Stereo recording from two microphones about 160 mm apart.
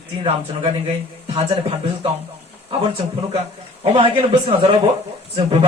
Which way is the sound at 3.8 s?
35° right (ahead or behind).